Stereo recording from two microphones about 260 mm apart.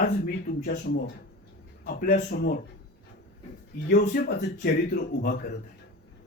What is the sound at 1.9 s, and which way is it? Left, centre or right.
Speech, left.